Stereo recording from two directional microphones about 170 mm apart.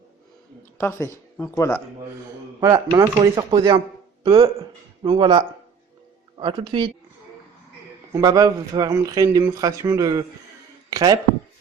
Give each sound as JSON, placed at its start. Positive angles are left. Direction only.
{"t": 0.8, "sound": "speech", "side_deg": 15}
{"t": 2.6, "sound": "speech", "side_deg": -20}
{"t": 8.1, "sound": "speech", "side_deg": -20}
{"t": 10.8, "sound": "a sound", "side_deg": -20}